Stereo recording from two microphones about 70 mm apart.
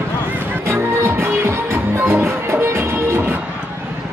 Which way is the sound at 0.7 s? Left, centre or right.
Right.